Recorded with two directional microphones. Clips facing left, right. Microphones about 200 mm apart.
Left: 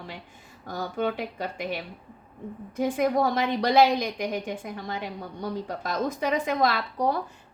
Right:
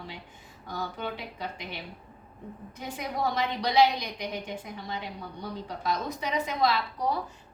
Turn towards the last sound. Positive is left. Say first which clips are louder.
# left 2 dB
turn(degrees=55)  # may be behind; listen again after turning